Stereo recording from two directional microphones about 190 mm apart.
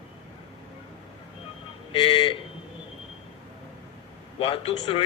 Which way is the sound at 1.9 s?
25° left (ahead or behind).